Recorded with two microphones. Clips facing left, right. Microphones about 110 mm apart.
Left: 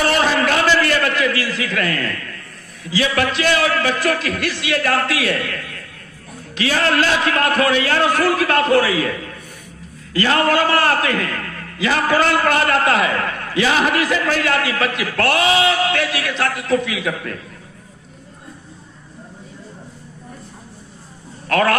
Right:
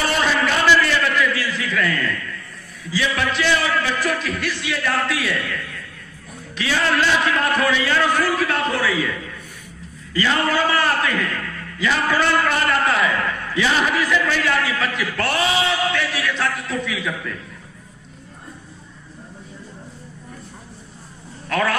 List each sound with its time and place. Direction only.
0.4 s a sound: 60° left (ahead or behind)
2.9 s a man's voice: 60° left (ahead or behind)
6.7 s a man's voice: 60° left (ahead or behind)
21.5 s a man's voice: 65° left (ahead or behind)